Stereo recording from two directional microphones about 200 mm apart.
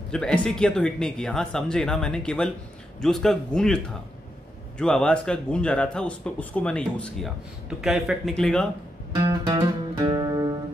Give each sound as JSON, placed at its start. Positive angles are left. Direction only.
{"t": 0.1, "sound": "speech", "side_deg": 5}
{"t": 9.1, "sound": "music", "side_deg": -15}